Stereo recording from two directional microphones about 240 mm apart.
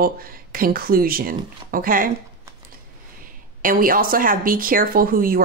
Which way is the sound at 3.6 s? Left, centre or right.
Right.